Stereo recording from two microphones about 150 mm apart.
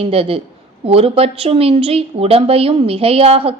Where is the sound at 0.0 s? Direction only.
40° right (ahead or behind).